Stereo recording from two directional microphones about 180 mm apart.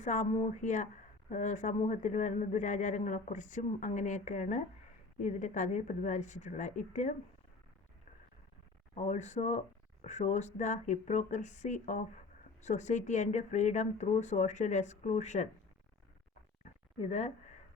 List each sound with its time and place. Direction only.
0.0 s a man's voice: 40° left (ahead or behind)
9.0 s speech: 40° left (ahead or behind)
17.0 s speech: 40° left (ahead or behind)